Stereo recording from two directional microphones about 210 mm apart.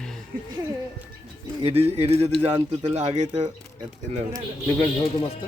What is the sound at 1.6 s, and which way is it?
Speech, 30° right (ahead or behind).